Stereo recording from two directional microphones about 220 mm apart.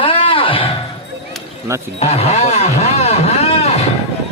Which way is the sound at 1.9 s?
25° left (ahead or behind).